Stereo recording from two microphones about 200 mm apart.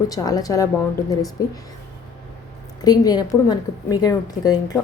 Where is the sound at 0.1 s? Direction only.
20° left (ahead or behind).